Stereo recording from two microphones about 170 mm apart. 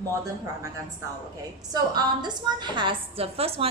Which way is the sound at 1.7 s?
25° right (ahead or behind).